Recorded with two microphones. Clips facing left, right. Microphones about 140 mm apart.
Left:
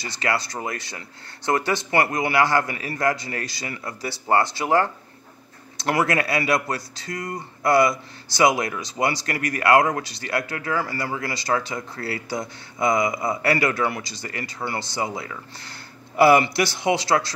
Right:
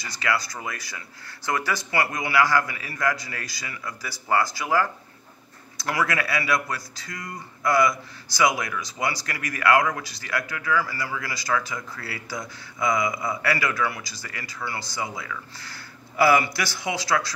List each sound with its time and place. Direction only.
0.0 s speech: 25° left (ahead or behind)
7.1 s speech: 50° left (ahead or behind)
7.3 s speech: 25° left (ahead or behind)